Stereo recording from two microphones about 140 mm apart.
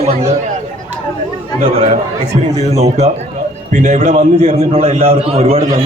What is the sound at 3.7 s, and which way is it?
A man's voice, 55° right (ahead or behind).